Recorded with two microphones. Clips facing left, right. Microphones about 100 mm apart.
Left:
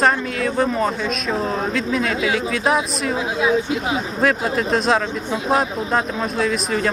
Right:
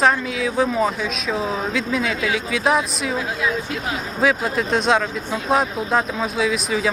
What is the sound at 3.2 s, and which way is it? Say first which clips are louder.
Speech: left 6 dB; 20° left (ahead or behind).